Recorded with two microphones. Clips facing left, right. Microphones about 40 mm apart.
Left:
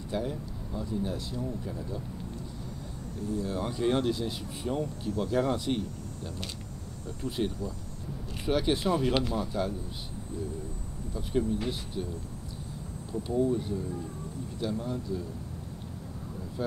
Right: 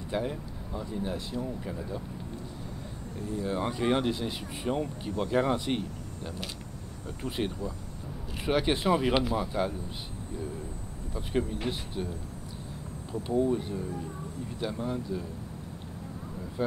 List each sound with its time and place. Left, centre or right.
0.1 s speech: right
3.2 s speech: right
11.1 s speech: right
16.6 s speech: right